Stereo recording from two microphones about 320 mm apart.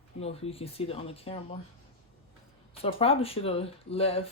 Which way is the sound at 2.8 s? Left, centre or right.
Centre.